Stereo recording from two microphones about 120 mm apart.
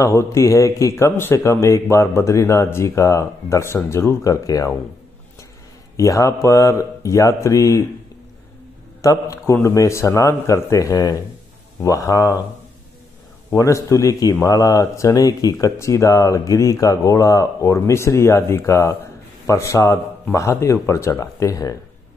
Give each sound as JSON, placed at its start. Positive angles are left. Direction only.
{"t": 0.0, "sound": "speech", "side_deg": 25}
{"t": 5.9, "sound": "speech", "side_deg": 25}
{"t": 9.0, "sound": "speech", "side_deg": 25}
{"t": 13.6, "sound": "speech", "side_deg": 25}